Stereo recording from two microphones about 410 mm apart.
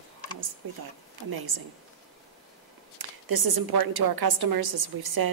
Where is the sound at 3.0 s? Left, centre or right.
Right.